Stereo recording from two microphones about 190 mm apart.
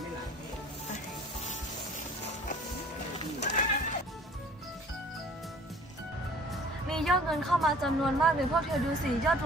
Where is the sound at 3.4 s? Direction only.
40° left (ahead or behind).